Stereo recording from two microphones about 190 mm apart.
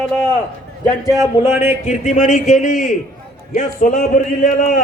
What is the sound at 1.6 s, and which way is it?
A man's voice, 35° left (ahead or behind).